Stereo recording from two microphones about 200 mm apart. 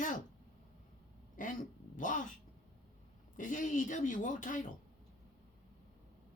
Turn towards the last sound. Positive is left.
turn(degrees=40)  # may be behind; listen again after turning